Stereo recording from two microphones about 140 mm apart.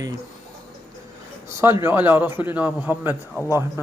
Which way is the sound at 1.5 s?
15° right (ahead or behind).